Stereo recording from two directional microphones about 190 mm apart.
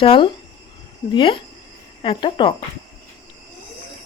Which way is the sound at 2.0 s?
25° left (ahead or behind).